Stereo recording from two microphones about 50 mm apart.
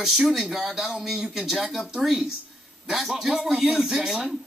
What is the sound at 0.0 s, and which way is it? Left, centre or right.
Speech, centre.